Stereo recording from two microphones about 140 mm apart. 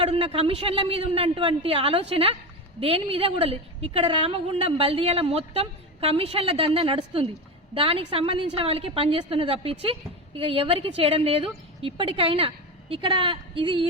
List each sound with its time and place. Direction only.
0.0 s a woman's voice: 45° right (ahead or behind)